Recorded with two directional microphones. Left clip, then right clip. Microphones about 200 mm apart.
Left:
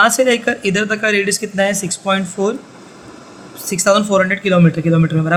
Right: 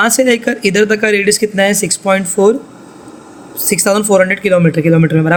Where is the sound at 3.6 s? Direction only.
20° right (ahead or behind).